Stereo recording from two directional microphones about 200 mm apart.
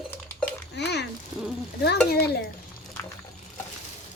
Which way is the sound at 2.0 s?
50° left (ahead or behind).